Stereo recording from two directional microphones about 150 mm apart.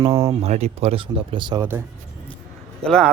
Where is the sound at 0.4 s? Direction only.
45° right (ahead or behind).